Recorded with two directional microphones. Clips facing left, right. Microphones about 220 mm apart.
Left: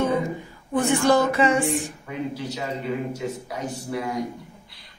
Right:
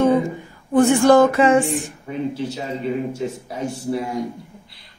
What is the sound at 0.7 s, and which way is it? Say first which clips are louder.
Speech: right 7 dB; 50° right (ahead or behind).